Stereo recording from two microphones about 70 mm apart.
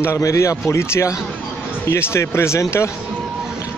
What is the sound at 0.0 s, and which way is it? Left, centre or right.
Speech, left.